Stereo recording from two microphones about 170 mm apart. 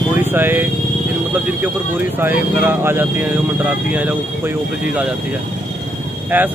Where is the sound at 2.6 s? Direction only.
15° right (ahead or behind).